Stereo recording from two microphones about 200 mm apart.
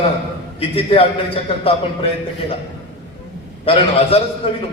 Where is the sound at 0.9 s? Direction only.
30° left (ahead or behind).